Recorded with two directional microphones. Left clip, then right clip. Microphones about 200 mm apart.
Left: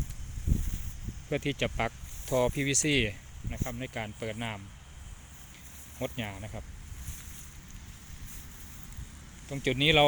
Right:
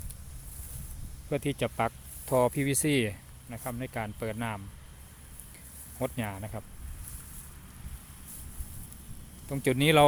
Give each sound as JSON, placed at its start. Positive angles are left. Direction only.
{"t": 1.3, "sound": "speech", "side_deg": -5}
{"t": 6.0, "sound": "speech", "side_deg": -15}
{"t": 9.5, "sound": "speech", "side_deg": -20}